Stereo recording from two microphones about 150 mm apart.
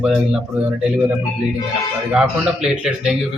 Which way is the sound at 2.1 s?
5° right (ahead or behind).